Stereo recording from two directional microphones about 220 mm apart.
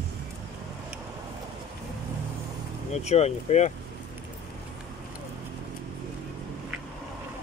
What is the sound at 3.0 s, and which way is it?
Speech, 30° left (ahead or behind).